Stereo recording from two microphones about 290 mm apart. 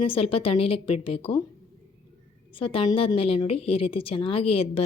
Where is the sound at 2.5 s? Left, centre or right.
Centre.